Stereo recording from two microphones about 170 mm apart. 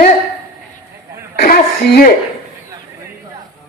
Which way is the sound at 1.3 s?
65° left (ahead or behind).